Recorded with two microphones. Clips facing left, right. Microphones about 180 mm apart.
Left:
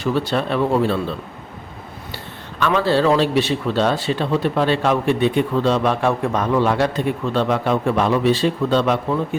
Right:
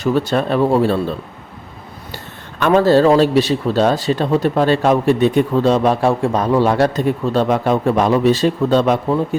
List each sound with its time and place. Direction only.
0.0 s speech: 45° right (ahead or behind)
2.1 s a man's voice: 45° right (ahead or behind)